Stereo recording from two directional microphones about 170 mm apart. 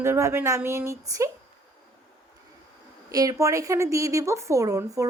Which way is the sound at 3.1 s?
20° right (ahead or behind).